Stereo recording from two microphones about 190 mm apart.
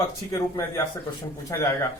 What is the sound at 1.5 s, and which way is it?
Speech, 15° left (ahead or behind).